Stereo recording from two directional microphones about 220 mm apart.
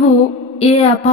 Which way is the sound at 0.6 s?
30° left (ahead or behind).